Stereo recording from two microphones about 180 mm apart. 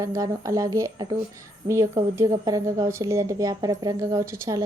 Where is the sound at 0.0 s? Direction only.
20° right (ahead or behind).